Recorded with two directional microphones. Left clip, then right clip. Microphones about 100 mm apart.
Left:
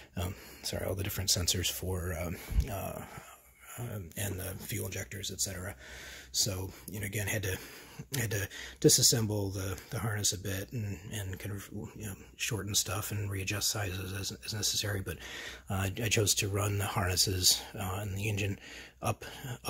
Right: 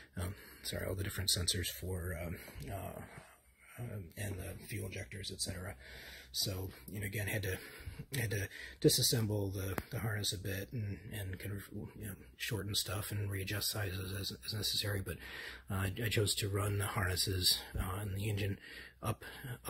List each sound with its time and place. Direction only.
0.1 s speech: 30° left (ahead or behind)
1.8 s speech: 55° left (ahead or behind)
4.8 s speech: 80° left
5.2 s speech: 45° left (ahead or behind)
6.4 s speech: 35° left (ahead or behind)